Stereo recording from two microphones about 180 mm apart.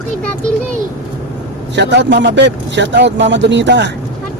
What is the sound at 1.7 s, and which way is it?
Speech, 75° right (ahead or behind).